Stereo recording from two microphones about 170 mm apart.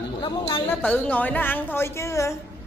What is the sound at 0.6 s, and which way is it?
A woman's voice, 10° left (ahead or behind).